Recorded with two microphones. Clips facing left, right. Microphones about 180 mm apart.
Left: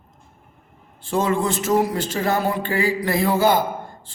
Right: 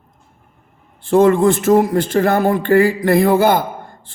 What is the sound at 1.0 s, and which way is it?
A man's voice, 55° right (ahead or behind).